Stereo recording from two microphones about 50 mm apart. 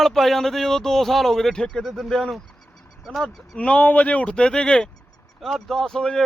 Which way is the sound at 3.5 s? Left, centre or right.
Left.